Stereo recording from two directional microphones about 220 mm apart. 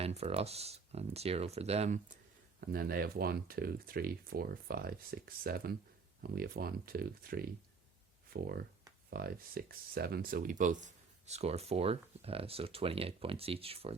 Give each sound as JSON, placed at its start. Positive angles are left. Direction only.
{"t": 0.0, "sound": "speech", "side_deg": -25}
{"t": 2.6, "sound": "speech", "side_deg": -45}